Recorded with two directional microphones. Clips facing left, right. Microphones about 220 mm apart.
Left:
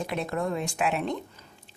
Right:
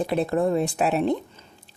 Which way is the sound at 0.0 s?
35° right (ahead or behind).